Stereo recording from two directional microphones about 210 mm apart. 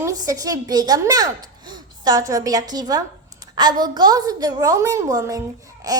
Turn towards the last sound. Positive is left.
turn(degrees=-15)  # may be behind; listen again after turning